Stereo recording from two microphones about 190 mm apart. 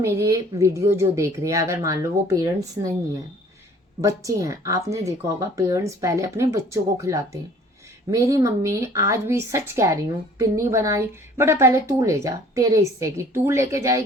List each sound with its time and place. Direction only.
0.0 s a woman's voice: 15° right (ahead or behind)
4.0 s a woman's voice: 15° right (ahead or behind)